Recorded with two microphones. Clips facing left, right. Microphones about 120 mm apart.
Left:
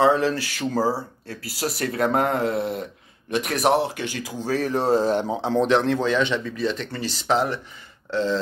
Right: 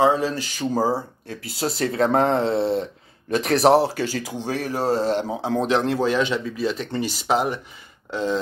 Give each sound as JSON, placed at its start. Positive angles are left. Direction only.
{"t": 0.0, "sound": "speech", "side_deg": -15}
{"t": 4.5, "sound": "speech", "side_deg": -15}
{"t": 4.7, "sound": "speech", "side_deg": 0}